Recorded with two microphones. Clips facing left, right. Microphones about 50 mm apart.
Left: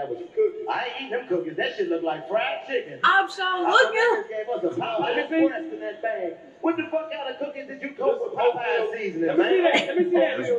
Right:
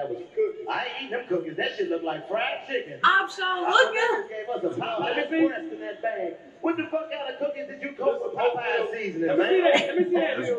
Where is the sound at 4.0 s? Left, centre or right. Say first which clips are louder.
Left 3 dB; left.